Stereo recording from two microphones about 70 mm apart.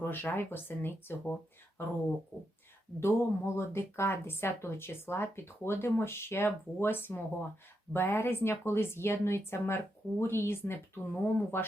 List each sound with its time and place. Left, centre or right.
0.0 s speech: left
3.0 s speech: left